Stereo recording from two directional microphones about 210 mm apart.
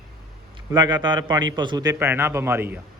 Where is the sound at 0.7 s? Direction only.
20° right (ahead or behind).